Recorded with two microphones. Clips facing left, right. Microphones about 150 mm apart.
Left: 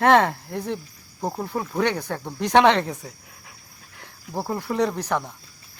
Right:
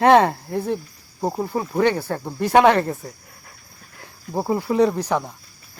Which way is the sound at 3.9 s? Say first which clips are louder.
Right 4 dB; 5° right (ahead or behind).